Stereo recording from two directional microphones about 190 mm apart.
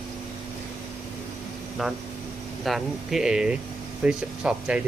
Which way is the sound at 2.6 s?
Centre (ahead or behind).